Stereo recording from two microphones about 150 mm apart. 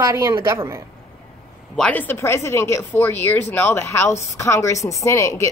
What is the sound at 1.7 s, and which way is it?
Speech, 10° left (ahead or behind).